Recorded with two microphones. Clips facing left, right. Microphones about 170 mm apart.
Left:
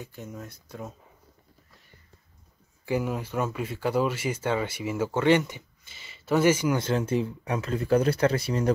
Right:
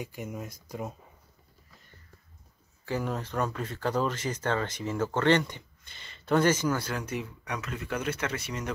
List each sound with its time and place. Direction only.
0.0 s speech: 10° right (ahead or behind)
2.8 s speech: 10° left (ahead or behind)
6.8 s speech: 25° left (ahead or behind)